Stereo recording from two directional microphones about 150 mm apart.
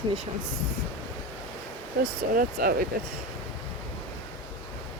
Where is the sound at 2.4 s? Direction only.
80° right.